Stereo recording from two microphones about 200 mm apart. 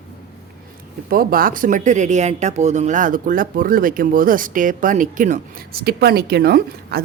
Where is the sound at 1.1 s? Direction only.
45° right (ahead or behind).